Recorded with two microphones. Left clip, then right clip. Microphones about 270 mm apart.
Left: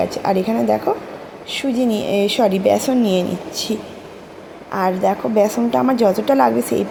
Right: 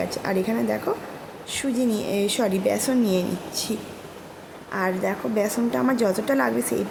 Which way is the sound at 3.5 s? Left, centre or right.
Centre.